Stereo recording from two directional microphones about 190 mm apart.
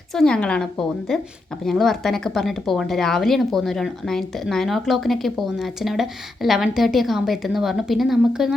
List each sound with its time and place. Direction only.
0.1 s a woman's voice: 5° left (ahead or behind)